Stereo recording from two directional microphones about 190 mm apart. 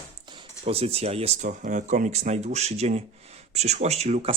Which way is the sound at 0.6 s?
30° right (ahead or behind).